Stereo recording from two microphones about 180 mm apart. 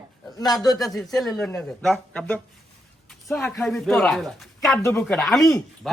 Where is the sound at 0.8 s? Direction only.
Centre (ahead or behind).